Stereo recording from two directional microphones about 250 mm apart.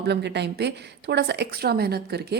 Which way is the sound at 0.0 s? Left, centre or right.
Right.